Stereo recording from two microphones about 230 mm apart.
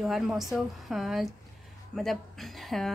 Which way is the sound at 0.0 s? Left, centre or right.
Centre.